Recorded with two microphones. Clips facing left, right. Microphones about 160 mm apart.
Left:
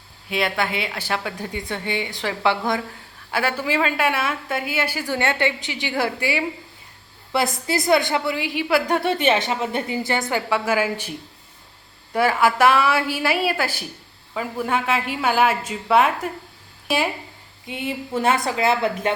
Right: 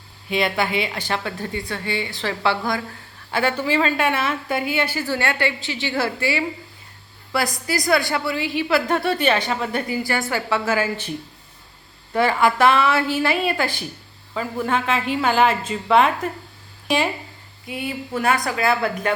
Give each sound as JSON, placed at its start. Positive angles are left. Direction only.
{"t": 0.3, "sound": "a woman's voice", "side_deg": 0}
{"t": 3.3, "sound": "a woman's voice", "side_deg": 5}
{"t": 12.1, "sound": "a woman's voice", "side_deg": 5}
{"t": 17.7, "sound": "a woman's voice", "side_deg": 25}